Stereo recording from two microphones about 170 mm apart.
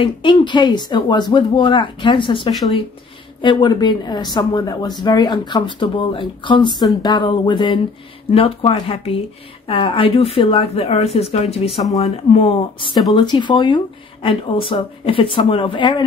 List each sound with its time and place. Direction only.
0.0 s speech: 30° left (ahead or behind)
2.5 s speech: centre (ahead or behind)
3.4 s speech: 25° left (ahead or behind)